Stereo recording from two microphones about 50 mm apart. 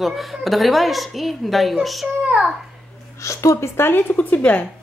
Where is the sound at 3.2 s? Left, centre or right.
Left.